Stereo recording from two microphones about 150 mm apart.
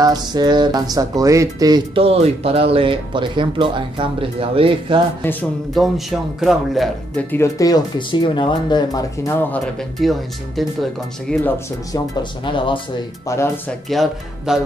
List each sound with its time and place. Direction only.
0.0 s speech: 25° right (ahead or behind)
2.0 s speech: 40° right (ahead or behind)
5.2 s speech: 10° left (ahead or behind)
5.8 s speech: centre (ahead or behind)
7.2 s speech: 20° left (ahead or behind)
9.5 s speech: centre (ahead or behind)
11.4 s speech: 15° left (ahead or behind)
12.2 s speech: 35° left (ahead or behind)
13.3 s speech: 20° left (ahead or behind)
13.7 s speech: centre (ahead or behind)